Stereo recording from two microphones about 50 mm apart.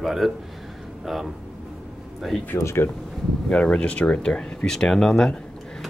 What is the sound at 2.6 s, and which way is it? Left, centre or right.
Speech, left.